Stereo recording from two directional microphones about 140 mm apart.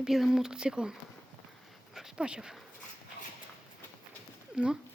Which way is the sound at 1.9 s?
5° right (ahead or behind).